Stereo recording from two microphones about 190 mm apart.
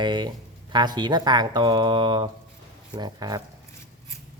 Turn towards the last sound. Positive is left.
turn(degrees=-20)  # may be behind; listen again after turning